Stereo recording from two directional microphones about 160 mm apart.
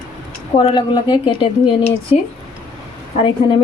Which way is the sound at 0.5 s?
35° left (ahead or behind).